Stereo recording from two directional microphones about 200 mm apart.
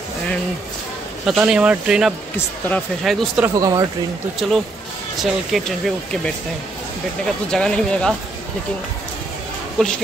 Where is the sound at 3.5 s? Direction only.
15° right (ahead or behind).